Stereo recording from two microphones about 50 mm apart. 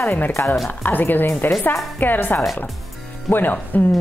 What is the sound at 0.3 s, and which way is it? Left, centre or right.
Speech, left.